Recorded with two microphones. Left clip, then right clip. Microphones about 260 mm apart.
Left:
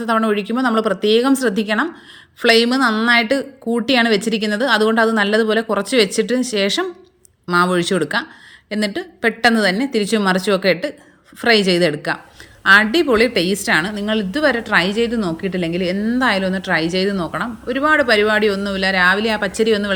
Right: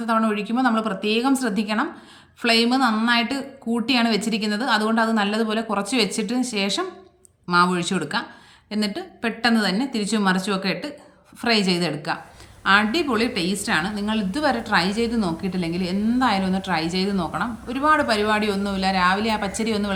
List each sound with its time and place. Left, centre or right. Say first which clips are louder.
0.0 s a woman's voice: left 5 dB; centre